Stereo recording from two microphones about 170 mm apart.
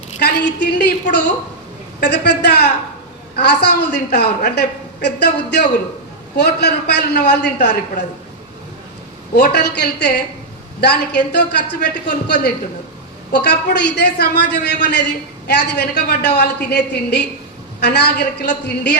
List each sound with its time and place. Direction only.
0.2 s a woman's voice: 80° left
2.0 s a woman's voice: 75° left (ahead or behind)
9.3 s a woman's voice: 70° left (ahead or behind)